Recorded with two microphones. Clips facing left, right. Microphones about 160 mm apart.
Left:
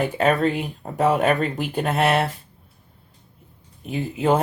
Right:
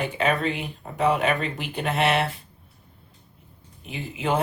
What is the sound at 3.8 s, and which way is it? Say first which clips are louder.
Speech: left 7 dB; 45° left (ahead or behind).